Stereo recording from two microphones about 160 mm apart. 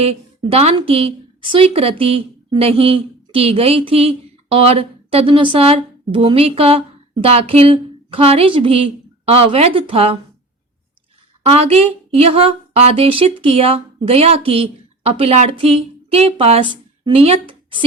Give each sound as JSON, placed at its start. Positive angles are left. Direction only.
{"t": 0.5, "sound": "a woman's voice", "side_deg": -40}
{"t": 11.4, "sound": "a woman's voice", "side_deg": -40}